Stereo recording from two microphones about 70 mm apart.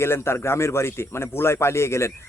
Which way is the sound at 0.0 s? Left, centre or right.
Left.